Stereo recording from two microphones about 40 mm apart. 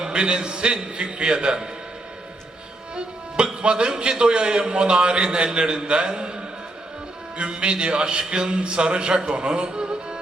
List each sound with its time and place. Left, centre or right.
0.0 s a man's voice: right
2.9 s a man's voice: right
7.6 s a man's voice: right